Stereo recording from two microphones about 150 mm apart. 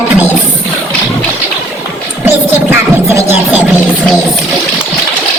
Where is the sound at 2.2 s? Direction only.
15° right (ahead or behind).